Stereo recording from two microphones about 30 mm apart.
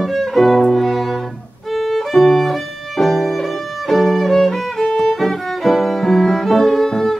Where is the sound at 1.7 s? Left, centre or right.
Centre.